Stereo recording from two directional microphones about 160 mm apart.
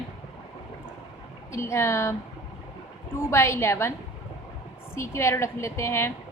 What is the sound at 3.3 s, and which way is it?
Speech, 15° left (ahead or behind).